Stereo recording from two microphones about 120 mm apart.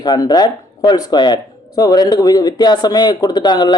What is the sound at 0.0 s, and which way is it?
A man's voice, 35° left (ahead or behind).